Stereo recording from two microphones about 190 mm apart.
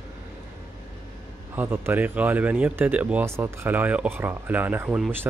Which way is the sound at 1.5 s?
10° right (ahead or behind).